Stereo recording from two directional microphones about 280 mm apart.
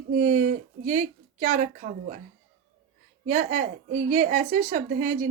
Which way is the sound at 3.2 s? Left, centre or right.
Right.